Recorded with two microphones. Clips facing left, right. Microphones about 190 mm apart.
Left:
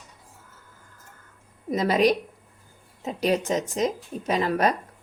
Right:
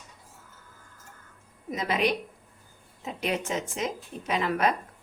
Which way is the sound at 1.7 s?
40° left (ahead or behind).